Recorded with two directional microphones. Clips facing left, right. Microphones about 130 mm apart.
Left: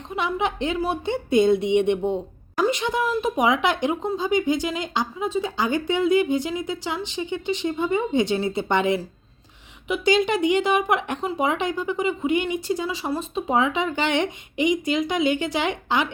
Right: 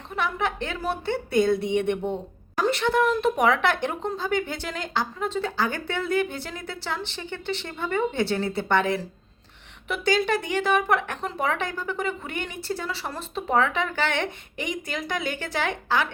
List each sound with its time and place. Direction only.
0.2 s a woman's voice: 20° left (ahead or behind)